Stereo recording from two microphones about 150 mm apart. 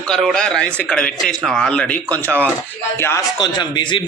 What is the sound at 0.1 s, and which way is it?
A man's voice, 5° left (ahead or behind).